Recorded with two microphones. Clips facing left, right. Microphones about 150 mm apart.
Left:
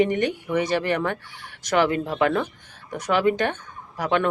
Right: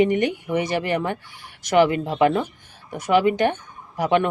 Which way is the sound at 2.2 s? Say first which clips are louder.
Right 3 dB; 20° right (ahead or behind).